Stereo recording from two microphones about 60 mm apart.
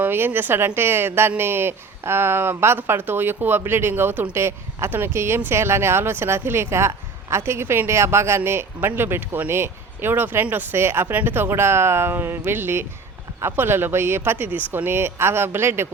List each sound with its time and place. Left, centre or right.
0.0 s speech: right
4.4 s a woman's voice: right
14.8 s speech: right